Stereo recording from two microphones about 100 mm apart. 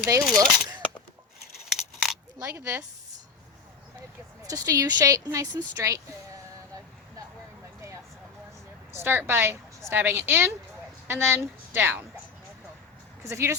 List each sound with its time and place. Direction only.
0.1 s speech: 35° right (ahead or behind)
1.7 s a sound: 5° right (ahead or behind)
2.6 s a woman's voice: 25° right (ahead or behind)
4.4 s speech: 35° right (ahead or behind)
9.0 s a woman's voice: 20° right (ahead or behind)
13.2 s a woman's voice: 30° right (ahead or behind)